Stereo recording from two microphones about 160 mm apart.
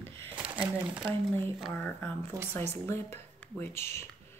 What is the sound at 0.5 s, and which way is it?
Speech, 10° right (ahead or behind).